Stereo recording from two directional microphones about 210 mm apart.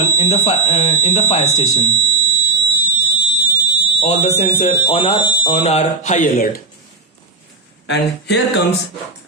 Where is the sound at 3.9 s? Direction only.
30° left (ahead or behind).